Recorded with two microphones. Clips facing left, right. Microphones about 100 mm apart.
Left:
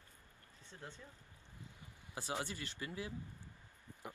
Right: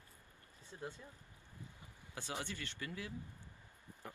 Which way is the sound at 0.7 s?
10° right (ahead or behind).